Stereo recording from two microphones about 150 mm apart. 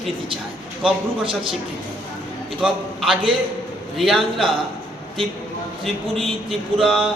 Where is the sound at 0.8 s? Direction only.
35° right (ahead or behind).